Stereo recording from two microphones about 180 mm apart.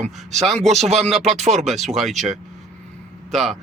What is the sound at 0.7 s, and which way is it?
Speech, 35° right (ahead or behind).